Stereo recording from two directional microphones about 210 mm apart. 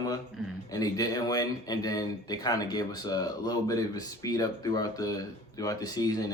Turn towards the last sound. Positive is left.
turn(degrees=15)  # may be behind; listen again after turning